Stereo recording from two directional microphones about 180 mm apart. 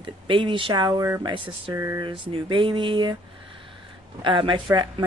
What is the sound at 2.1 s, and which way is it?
Speech, 30° right (ahead or behind).